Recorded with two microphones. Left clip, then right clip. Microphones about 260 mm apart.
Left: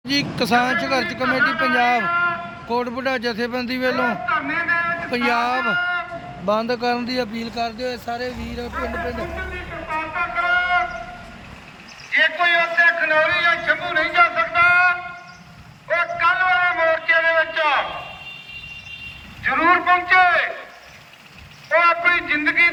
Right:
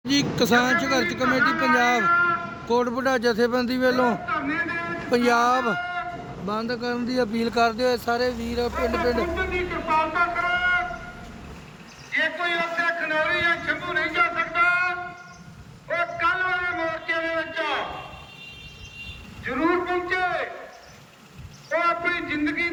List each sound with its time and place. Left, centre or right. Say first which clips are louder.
0.5 s a man's voice: left 3 dB; centre
6.5 s speech: left 7 dB; centre
8.7 s speech: right 1 dB; right
10.3 s a sound: left 4 dB; centre
12.1 s a sound: left 7 dB; centre
19.4 s speech: left 7 dB; centre
21.7 s speech: left 7 dB; centre